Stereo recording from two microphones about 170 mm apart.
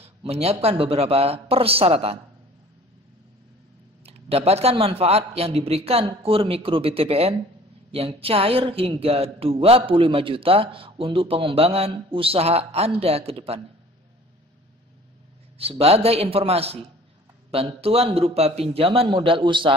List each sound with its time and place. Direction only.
0.0 s speech: 35° right (ahead or behind)
4.0 s speech: 35° right (ahead or behind)
15.5 s speech: 35° right (ahead or behind)